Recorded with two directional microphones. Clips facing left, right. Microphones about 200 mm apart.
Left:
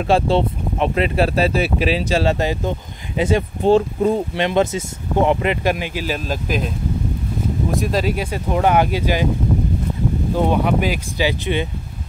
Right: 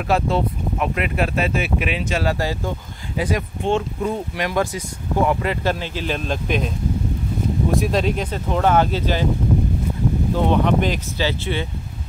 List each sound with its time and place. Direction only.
0.0 s speech: 25° left (ahead or behind); by 6.7 s centre (ahead or behind)
7.7 s speech: centre (ahead or behind)
10.3 s speech: 10° left (ahead or behind)